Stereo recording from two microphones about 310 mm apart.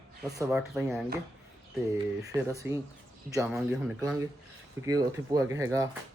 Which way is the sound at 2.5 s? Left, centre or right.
Centre.